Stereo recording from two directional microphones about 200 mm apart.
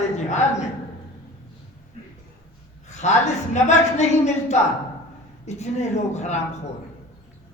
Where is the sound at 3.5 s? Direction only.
35° left (ahead or behind).